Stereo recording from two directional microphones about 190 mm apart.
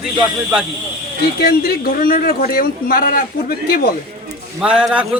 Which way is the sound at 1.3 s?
50° left (ahead or behind).